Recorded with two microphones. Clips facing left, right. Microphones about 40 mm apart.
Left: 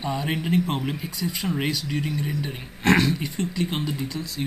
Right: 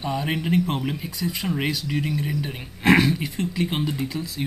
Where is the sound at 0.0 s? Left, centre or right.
Centre.